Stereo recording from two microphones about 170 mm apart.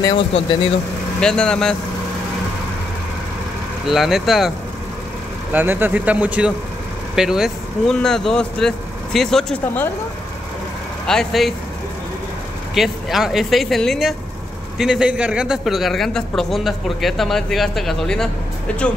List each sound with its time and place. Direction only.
0.3 s speech: 35° left (ahead or behind)
1.2 s a man's voice: 5° left (ahead or behind)
3.8 s a man's voice: centre (ahead or behind)
5.5 s a man's voice: 10° right (ahead or behind); by 9.8 s 5° left (ahead or behind)
11.1 s a man's voice: centre (ahead or behind)
12.7 s a man's voice: centre (ahead or behind)